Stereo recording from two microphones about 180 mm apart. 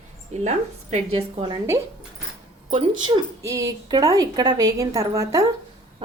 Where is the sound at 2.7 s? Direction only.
30° right (ahead or behind).